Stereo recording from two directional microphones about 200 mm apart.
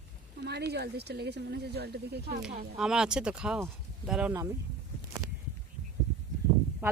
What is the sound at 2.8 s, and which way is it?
Speech, 5° right (ahead or behind).